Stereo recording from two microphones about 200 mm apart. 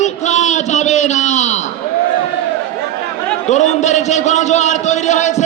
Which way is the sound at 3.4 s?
35° left (ahead or behind).